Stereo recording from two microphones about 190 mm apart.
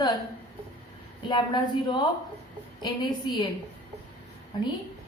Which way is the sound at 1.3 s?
25° left (ahead or behind).